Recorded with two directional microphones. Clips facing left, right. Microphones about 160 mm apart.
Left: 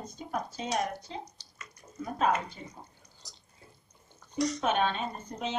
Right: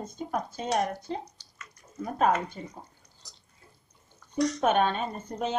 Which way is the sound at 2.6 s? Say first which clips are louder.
Right 5 dB; 45° right (ahead or behind).